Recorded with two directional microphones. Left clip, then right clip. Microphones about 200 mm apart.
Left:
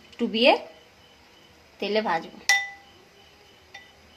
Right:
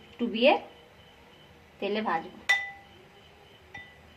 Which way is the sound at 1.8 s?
55° left (ahead or behind).